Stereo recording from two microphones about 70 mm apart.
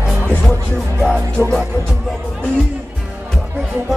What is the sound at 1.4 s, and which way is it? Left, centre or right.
Music, left.